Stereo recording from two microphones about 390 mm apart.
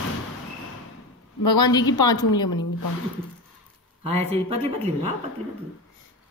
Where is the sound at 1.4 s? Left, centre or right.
Centre.